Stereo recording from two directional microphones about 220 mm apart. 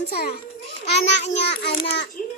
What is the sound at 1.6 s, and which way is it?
Speech, 50° left (ahead or behind).